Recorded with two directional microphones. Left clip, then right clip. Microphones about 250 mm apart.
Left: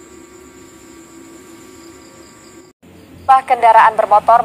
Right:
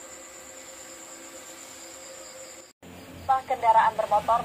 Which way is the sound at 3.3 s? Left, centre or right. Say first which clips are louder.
Left 13 dB; left.